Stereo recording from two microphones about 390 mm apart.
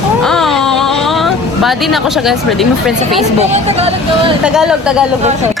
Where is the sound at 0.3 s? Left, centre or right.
Centre.